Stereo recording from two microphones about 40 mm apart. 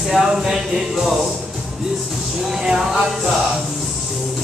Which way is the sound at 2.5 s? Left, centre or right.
Centre.